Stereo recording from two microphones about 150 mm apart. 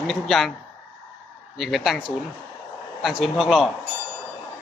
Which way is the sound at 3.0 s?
Centre (ahead or behind).